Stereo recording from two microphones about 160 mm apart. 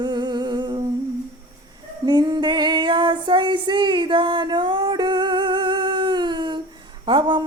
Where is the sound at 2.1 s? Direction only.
25° right (ahead or behind).